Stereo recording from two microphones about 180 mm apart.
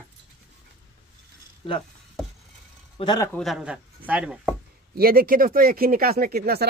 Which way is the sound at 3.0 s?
25° left (ahead or behind).